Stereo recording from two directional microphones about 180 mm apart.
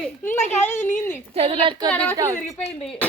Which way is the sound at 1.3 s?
30° right (ahead or behind).